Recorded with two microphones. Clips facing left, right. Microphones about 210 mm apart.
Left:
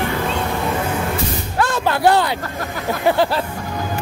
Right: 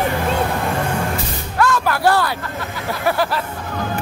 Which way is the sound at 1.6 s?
25° left (ahead or behind).